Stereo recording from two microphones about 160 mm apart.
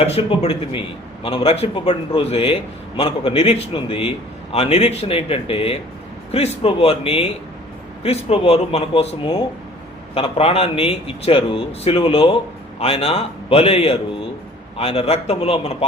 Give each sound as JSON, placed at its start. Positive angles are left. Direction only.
{"t": 0.0, "sound": "a man's voice", "side_deg": 35}